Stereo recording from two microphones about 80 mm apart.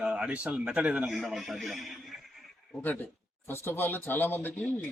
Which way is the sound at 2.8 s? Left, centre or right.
Left.